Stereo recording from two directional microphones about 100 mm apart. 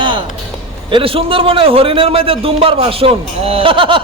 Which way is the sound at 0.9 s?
60° right (ahead or behind).